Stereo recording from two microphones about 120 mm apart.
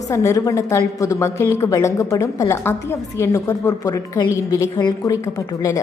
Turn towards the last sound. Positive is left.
turn(degrees=25)  # may be behind; listen again after turning